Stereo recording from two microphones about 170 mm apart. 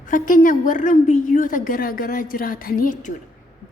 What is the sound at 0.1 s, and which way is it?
A woman's voice, 50° left (ahead or behind).